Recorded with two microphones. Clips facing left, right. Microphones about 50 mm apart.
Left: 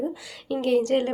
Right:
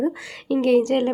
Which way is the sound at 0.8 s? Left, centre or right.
Right.